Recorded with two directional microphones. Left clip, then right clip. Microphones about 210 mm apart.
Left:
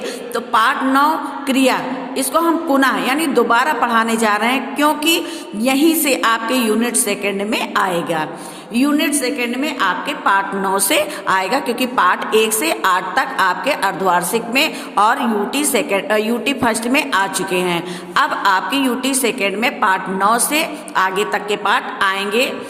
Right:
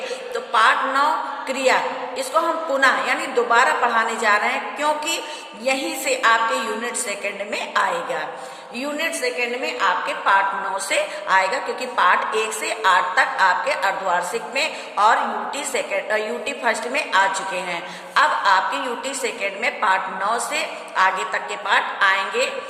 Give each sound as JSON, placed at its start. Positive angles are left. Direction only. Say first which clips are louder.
{"t": 0.3, "sound": "a woman's voice", "louder": "left 2 dB", "side_deg": 50}